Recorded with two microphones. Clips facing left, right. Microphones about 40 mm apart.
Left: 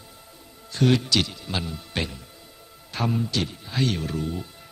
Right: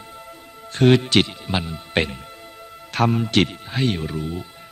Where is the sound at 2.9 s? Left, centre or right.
Right.